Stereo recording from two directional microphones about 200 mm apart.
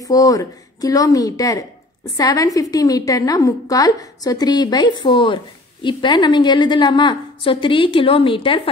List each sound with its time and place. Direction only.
0.0 s a woman's voice: 15° left (ahead or behind)